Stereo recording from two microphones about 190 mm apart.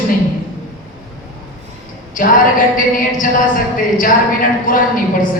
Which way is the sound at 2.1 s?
45° left (ahead or behind).